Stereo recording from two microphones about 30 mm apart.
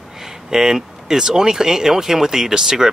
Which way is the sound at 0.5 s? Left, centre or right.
Centre.